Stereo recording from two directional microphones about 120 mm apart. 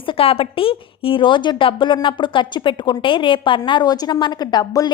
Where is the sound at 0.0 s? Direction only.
50° left (ahead or behind).